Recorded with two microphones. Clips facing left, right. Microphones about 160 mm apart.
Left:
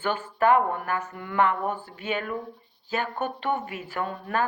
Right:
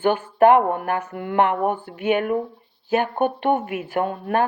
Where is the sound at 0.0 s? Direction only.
55° right (ahead or behind).